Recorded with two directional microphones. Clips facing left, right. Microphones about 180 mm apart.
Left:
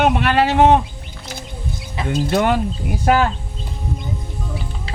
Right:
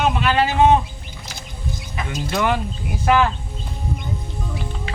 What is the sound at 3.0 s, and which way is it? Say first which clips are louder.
Speech: left 1 dB; 40° left (ahead or behind).